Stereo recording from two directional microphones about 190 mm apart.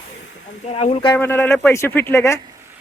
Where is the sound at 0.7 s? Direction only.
30° left (ahead or behind).